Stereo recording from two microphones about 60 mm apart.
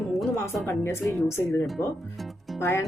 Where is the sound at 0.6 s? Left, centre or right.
Left.